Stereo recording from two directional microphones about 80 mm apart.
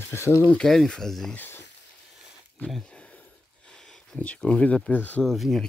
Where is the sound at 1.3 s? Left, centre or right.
Left.